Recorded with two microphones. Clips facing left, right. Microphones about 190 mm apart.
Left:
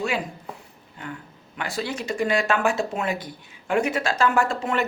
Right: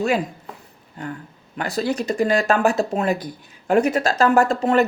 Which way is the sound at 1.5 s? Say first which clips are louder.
Right 6 dB; 40° right (ahead or behind).